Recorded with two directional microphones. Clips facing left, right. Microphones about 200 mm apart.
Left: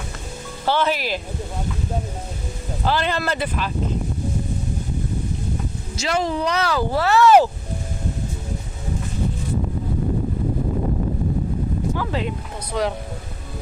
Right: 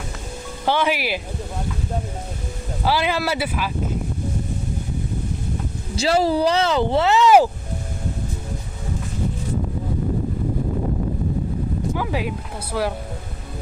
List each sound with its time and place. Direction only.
0.6 s speech: 15° right (ahead or behind)
2.8 s speech: 10° right (ahead or behind)
6.0 s speech: 35° right (ahead or behind)
11.9 s a sound: 10° right (ahead or behind)
12.7 s speech: 5° right (ahead or behind)